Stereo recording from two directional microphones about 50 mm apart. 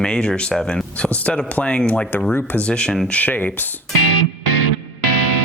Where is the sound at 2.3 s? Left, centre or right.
Left.